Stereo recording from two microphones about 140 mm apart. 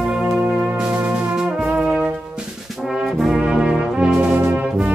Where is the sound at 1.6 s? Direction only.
5° right (ahead or behind).